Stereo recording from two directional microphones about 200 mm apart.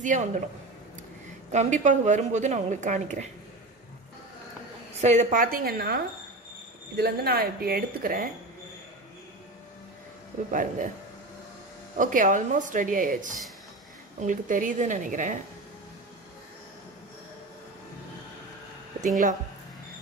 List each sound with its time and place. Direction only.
0.0 s a woman's voice: 40° right (ahead or behind)
1.5 s a woman's voice: 35° right (ahead or behind)
5.0 s speech: 35° right (ahead or behind)
10.5 s a woman's voice: 40° right (ahead or behind)
12.0 s a woman's voice: 40° right (ahead or behind)